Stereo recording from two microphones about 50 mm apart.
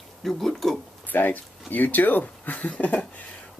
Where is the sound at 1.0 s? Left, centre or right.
Left.